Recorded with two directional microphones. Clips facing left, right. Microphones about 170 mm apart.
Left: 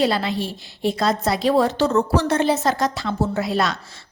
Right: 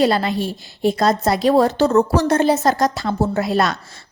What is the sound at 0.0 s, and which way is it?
A woman's voice, 45° right (ahead or behind).